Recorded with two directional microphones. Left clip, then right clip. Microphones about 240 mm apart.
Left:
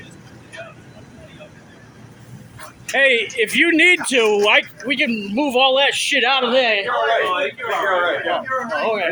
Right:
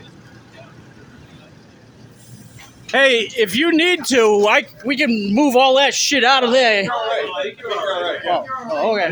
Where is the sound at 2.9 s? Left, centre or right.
Right.